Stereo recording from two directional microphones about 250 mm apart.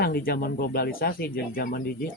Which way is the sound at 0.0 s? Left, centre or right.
Left.